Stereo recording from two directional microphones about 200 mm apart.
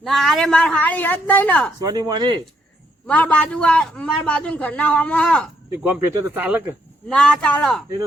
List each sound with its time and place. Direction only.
0.0 s a woman's voice: centre (ahead or behind)
1.8 s speech: 20° right (ahead or behind)
3.1 s a man's voice: 5° left (ahead or behind)
5.8 s speech: 10° right (ahead or behind)
7.1 s a man's voice: 5° left (ahead or behind)